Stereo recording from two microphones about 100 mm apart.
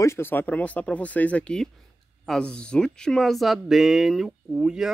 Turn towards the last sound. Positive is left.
turn(degrees=-5)  # may be behind; listen again after turning